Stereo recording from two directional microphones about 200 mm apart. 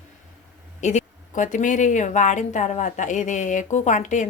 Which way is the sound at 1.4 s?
40° left (ahead or behind).